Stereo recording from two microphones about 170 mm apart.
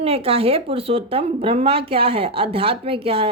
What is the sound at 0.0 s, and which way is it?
A woman's voice, 35° right (ahead or behind).